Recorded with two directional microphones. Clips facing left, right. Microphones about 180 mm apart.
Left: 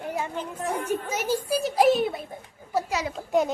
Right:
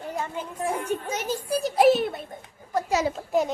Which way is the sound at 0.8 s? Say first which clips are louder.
Left 1 dB; 10° left (ahead or behind).